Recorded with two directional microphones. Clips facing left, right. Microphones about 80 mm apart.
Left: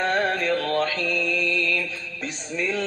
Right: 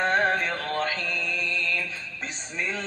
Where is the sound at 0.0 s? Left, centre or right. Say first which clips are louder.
Even; right.